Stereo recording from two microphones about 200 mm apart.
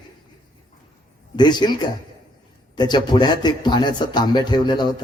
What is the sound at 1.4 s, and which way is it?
A man's voice, 20° left (ahead or behind).